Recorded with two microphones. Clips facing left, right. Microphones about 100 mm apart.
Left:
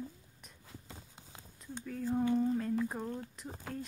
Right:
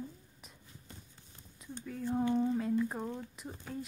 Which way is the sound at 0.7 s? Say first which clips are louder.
Left 6 dB; 90° left.